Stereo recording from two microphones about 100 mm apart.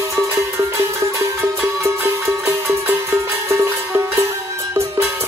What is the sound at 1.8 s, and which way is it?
Music, 25° right (ahead or behind).